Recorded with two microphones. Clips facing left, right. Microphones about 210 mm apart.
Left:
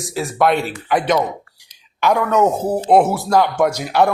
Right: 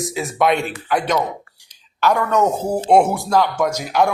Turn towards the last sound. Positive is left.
turn(degrees=10)  # may be behind; listen again after turning